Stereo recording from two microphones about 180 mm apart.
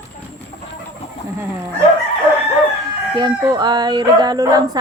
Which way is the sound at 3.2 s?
25° right (ahead or behind).